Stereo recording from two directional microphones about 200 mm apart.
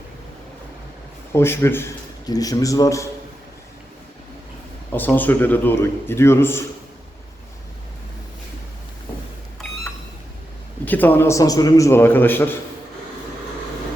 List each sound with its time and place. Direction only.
1.3 s a man's voice: 10° left (ahead or behind)
4.9 s a man's voice: 10° left (ahead or behind)
10.8 s a man's voice: 10° left (ahead or behind)